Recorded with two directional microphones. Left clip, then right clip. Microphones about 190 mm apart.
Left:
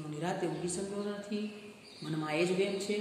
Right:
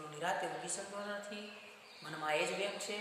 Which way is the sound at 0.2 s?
10° left (ahead or behind).